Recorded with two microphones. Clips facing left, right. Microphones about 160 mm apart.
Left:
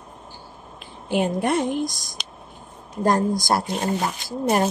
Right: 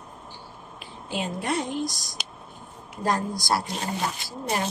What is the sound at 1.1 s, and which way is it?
A woman's voice, 55° left (ahead or behind).